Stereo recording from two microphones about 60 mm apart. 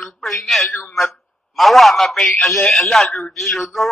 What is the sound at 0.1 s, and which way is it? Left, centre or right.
A man's voice, centre.